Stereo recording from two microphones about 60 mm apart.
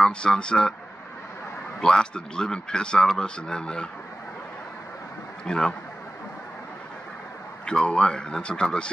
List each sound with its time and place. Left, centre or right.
0.0 s speech: centre
1.8 s speech: centre
5.4 s speech: centre
7.6 s speech: centre